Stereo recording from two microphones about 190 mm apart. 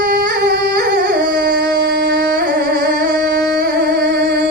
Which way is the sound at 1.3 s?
60° right (ahead or behind).